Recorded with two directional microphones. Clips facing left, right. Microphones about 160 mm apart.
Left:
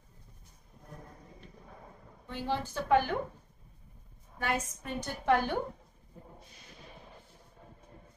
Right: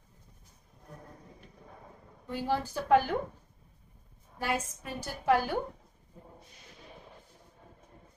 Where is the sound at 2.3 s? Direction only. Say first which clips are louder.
Right 3 dB; 10° right (ahead or behind).